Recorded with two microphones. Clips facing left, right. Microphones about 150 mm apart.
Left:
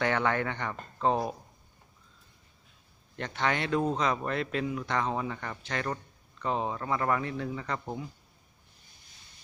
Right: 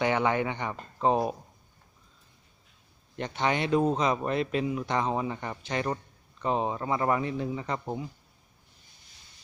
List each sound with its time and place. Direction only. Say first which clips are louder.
0.0 s speech: right 2 dB; 15° right (ahead or behind)
3.2 s speech: right 2 dB; 20° right (ahead or behind)